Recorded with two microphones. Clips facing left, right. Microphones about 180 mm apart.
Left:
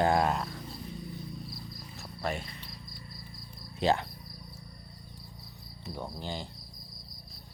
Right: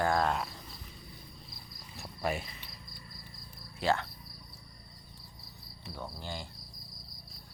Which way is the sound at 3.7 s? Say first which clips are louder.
Left 3 dB; 20° left (ahead or behind).